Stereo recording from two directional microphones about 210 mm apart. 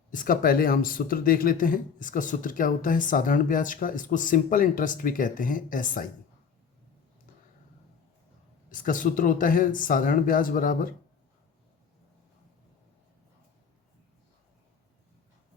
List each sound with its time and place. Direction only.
0.1 s speech: 40° left (ahead or behind)
8.7 s speech: 40° left (ahead or behind)